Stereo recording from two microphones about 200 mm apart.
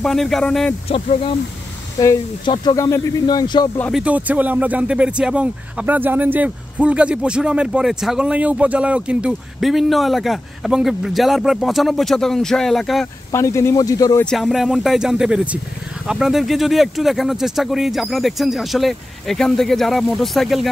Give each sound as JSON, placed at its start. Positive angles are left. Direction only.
{"t": 0.0, "sound": "speech", "side_deg": 0}
{"t": 0.8, "sound": "speech", "side_deg": 30}
{"t": 3.9, "sound": "speech", "side_deg": -5}
{"t": 13.3, "sound": "speech", "side_deg": 15}
{"t": 14.2, "sound": "speech", "side_deg": 0}